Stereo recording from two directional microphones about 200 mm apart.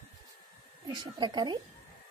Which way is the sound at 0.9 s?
20° right (ahead or behind).